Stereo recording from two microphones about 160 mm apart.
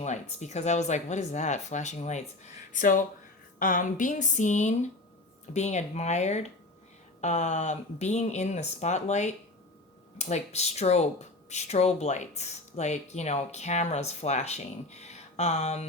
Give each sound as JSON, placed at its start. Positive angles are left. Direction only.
{"t": 0.0, "sound": "a woman's voice", "side_deg": 45}